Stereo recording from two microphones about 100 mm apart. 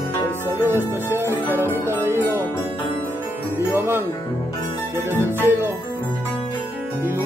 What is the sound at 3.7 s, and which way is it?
Music, 20° right (ahead or behind).